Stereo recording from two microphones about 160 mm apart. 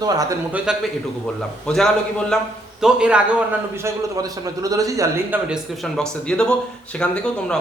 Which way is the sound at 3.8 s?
20° right (ahead or behind).